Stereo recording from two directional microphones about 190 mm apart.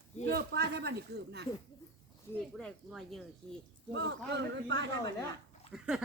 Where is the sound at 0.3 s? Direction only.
60° right (ahead or behind).